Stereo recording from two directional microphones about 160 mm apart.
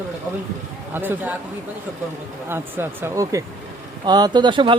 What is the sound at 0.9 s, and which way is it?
Speech, 10° right (ahead or behind).